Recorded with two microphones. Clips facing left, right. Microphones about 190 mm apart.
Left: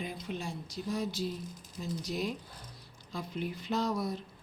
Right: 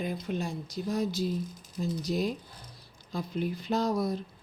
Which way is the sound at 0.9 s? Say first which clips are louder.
Right 5 dB; 40° right (ahead or behind).